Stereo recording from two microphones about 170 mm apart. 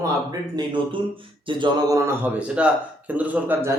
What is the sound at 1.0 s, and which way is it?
A man's voice, 30° right (ahead or behind).